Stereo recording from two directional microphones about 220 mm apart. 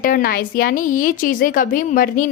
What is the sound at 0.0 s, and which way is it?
A woman's voice, 40° left (ahead or behind).